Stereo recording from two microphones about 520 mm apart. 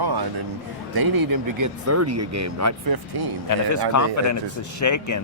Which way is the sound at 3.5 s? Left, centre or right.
Left.